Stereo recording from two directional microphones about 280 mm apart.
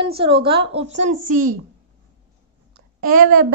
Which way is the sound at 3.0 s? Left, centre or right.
Right.